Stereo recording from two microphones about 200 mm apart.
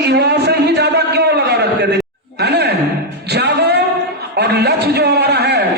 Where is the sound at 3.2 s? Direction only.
55° right (ahead or behind).